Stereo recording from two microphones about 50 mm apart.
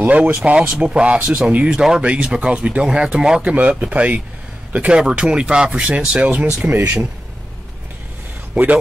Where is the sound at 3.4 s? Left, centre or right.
Right.